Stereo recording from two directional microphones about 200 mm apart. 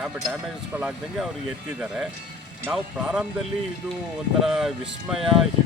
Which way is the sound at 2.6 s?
5° right (ahead or behind).